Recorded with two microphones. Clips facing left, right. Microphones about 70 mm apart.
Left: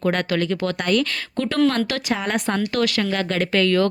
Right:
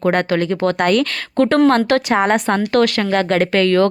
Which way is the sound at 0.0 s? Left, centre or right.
Right.